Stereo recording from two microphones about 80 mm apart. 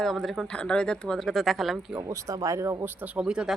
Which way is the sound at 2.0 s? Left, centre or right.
Right.